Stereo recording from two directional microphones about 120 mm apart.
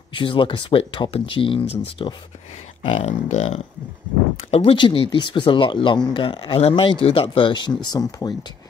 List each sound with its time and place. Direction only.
0.1 s speech: 45° left (ahead or behind)
3.1 s speech: 65° left (ahead or behind); by 6.6 s 45° left (ahead or behind)
6.6 s speech: 55° left (ahead or behind); by 8.4 s 35° left (ahead or behind)